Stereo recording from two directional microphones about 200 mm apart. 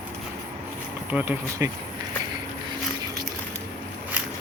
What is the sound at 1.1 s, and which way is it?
Speech, 10° right (ahead or behind).